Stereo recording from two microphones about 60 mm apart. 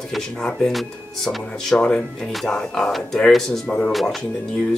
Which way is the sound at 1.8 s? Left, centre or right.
Centre.